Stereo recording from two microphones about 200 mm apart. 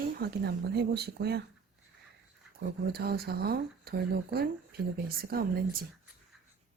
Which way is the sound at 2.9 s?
50° right (ahead or behind).